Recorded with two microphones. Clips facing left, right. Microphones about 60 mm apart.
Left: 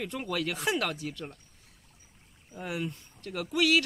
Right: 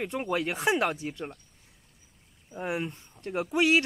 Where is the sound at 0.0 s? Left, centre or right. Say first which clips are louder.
Right 3 dB; right.